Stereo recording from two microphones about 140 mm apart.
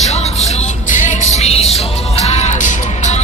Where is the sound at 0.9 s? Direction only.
60° left (ahead or behind).